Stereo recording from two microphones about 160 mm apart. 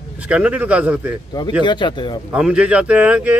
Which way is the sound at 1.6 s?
30° left (ahead or behind).